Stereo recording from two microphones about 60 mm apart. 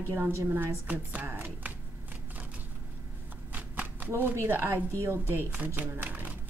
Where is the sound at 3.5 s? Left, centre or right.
Right.